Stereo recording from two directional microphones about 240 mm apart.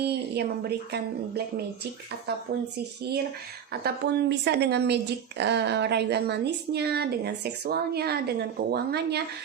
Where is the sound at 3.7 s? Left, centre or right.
Right.